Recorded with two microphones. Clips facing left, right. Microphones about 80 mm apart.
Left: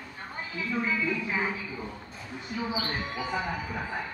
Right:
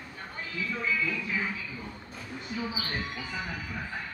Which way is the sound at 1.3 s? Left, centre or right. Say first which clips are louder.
Left 3 dB; left.